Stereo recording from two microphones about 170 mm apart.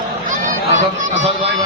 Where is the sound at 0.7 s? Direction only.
45° right (ahead or behind).